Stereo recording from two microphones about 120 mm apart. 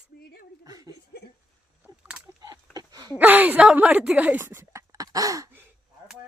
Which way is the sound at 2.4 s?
30° right (ahead or behind).